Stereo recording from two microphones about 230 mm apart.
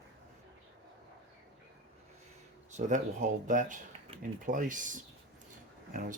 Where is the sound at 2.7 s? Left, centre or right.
Right.